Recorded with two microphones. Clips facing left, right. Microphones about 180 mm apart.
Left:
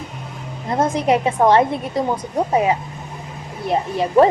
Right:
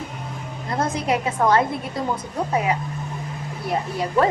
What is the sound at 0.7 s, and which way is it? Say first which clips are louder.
A woman's voice: left 5 dB; 25° left (ahead or behind).